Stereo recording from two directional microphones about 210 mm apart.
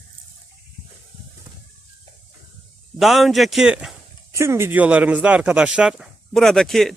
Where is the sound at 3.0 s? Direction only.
Centre (ahead or behind).